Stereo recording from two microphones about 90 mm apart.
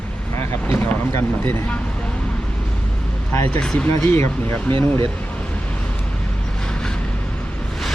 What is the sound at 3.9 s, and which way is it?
Speech, 30° left (ahead or behind).